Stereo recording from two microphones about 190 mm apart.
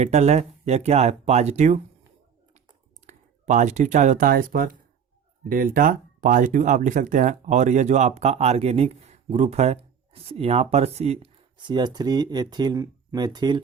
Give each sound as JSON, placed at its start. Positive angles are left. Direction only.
{"t": 0.0, "sound": "speech", "side_deg": -35}
{"t": 3.1, "sound": "speech", "side_deg": -40}